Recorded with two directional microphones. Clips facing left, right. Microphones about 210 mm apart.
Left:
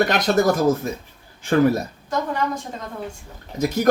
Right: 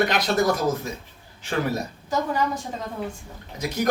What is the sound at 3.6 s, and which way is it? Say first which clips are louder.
Speech: left 6 dB; 45° left (ahead or behind).